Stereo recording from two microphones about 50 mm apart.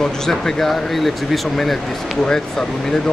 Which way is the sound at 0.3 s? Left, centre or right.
Centre.